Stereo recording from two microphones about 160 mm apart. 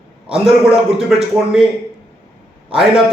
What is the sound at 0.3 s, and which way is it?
A man's voice, 5° right (ahead or behind).